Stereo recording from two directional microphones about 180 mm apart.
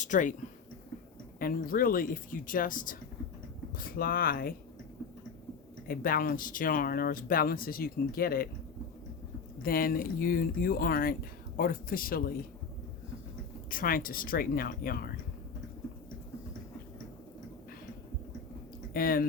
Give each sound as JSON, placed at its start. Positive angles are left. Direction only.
{"t": 0.0, "sound": "speech", "side_deg": 45}
{"t": 1.4, "sound": "speech", "side_deg": 50}
{"t": 5.9, "sound": "speech", "side_deg": 55}
{"t": 9.6, "sound": "speech", "side_deg": 55}
{"t": 13.7, "sound": "speech", "side_deg": 50}
{"t": 18.9, "sound": "speech", "side_deg": 55}